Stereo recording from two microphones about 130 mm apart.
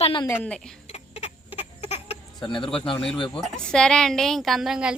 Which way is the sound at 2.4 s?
40° left (ahead or behind).